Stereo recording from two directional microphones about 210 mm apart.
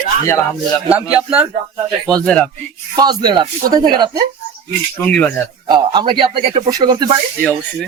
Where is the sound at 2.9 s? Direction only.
20° right (ahead or behind).